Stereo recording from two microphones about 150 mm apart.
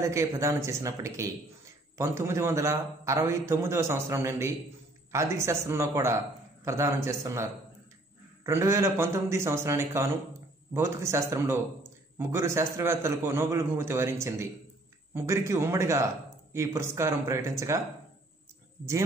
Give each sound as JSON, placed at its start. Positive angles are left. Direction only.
{"t": 0.0, "sound": "a man's voice", "side_deg": -20}
{"t": 8.5, "sound": "a man's voice", "side_deg": -20}